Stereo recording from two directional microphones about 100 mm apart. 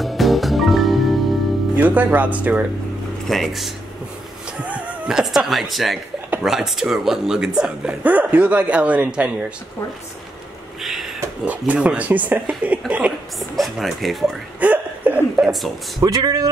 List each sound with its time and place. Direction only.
0.0 s music: centre (ahead or behind)
1.8 s speech: 15° right (ahead or behind)
3.3 s speech: centre (ahead or behind)
4.6 s speech: 15° right (ahead or behind)
10.8 s a sound: centre (ahead or behind)
11.4 s speech: 15° right (ahead or behind)
13.4 s speech: centre (ahead or behind)
14.6 s speech: 15° right (ahead or behind)
16.0 s speech: 40° right (ahead or behind)